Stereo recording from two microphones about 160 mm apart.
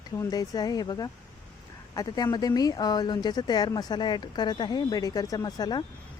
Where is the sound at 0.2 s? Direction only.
25° left (ahead or behind).